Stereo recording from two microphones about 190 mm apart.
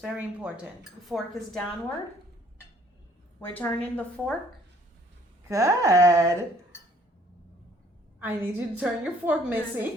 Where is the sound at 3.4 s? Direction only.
10° left (ahead or behind).